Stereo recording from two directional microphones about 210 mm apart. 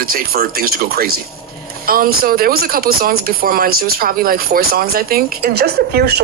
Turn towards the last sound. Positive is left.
turn(degrees=-50)  # may be behind; listen again after turning